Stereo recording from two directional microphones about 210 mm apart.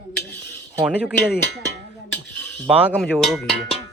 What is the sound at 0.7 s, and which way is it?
Speech, 5° right (ahead or behind).